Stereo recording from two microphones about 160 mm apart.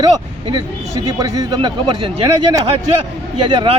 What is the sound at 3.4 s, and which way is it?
Speech, 30° right (ahead or behind).